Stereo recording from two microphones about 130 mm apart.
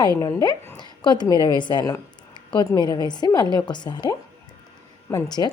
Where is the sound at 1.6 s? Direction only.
35° left (ahead or behind).